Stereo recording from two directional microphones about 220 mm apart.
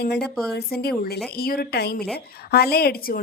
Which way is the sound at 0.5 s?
45° left (ahead or behind).